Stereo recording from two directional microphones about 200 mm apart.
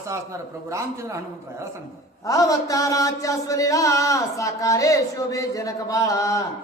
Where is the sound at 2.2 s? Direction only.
15° left (ahead or behind).